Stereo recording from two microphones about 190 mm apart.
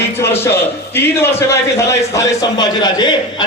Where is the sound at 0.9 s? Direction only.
10° left (ahead or behind).